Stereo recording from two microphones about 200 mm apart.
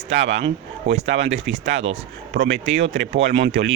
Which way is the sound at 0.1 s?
65° right (ahead or behind).